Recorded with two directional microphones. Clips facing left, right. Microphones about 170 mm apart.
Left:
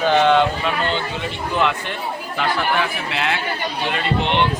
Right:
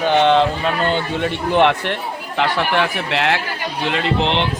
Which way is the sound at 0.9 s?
60° right (ahead or behind).